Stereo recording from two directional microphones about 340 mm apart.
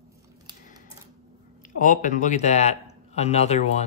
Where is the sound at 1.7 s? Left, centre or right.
Left.